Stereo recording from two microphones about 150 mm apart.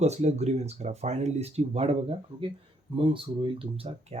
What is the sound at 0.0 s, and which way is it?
Speech, 50° right (ahead or behind).